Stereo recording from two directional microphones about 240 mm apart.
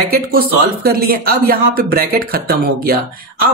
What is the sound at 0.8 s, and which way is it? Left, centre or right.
Speech, right.